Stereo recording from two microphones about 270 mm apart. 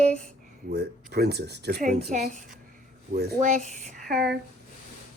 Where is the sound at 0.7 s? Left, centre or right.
Right.